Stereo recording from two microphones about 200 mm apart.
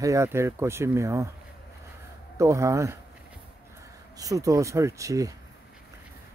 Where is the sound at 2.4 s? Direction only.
15° right (ahead or behind).